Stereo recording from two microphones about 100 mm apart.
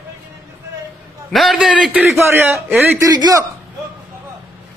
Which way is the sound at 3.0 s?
40° right (ahead or behind).